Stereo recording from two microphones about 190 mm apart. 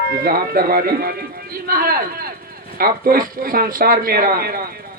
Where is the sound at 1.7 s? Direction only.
50° right (ahead or behind).